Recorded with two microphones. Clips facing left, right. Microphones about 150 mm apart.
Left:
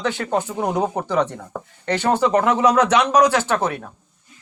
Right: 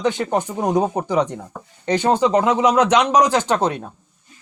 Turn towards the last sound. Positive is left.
turn(degrees=-20)  # may be behind; listen again after turning